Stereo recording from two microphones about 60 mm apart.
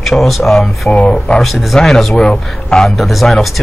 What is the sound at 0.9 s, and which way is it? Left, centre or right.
Speech, centre.